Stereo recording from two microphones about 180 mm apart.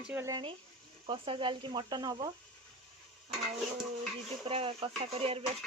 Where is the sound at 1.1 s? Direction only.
30° right (ahead or behind).